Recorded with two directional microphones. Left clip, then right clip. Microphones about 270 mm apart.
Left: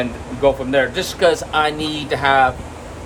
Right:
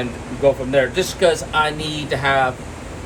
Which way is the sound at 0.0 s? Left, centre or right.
Left.